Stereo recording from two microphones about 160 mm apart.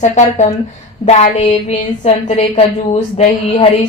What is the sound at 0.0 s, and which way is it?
A woman's voice, 50° left (ahead or behind).